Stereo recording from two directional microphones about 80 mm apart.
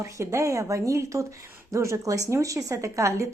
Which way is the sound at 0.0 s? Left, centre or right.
Right.